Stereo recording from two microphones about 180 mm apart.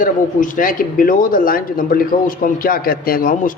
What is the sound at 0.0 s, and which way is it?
Speech, 50° left (ahead or behind).